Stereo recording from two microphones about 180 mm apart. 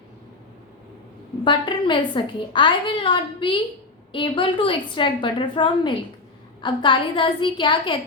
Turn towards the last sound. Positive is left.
turn(degrees=25)  # may be behind; listen again after turning